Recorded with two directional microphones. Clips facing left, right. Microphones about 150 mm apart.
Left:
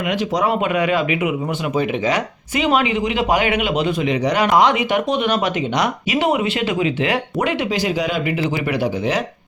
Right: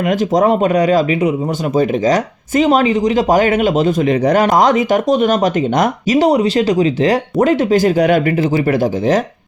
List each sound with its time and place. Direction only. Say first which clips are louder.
0.1 s speech: right 6 dB; 45° right (ahead or behind)
8.5 s speech: right 6 dB; 40° right (ahead or behind)